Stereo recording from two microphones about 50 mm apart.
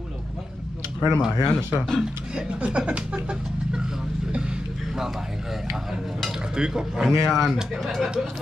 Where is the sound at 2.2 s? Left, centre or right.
Centre.